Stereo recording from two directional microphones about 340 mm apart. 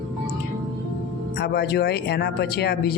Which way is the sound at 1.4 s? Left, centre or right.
Left.